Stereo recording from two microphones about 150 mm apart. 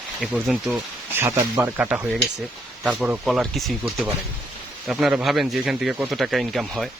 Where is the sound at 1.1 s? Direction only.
15° right (ahead or behind); by 3.8 s centre (ahead or behind).